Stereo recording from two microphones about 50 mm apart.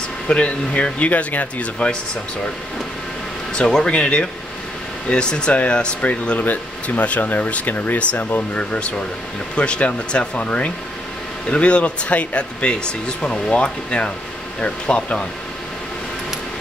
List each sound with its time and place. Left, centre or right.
0.3 s speech: left
3.5 s speech: centre
6.4 s speech: left
8.5 s speech: centre